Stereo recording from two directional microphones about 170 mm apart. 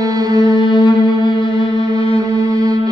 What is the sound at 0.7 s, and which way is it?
Music, 30° left (ahead or behind).